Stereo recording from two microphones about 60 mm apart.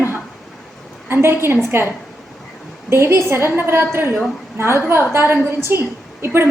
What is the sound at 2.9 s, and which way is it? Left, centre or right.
A woman's voice, right.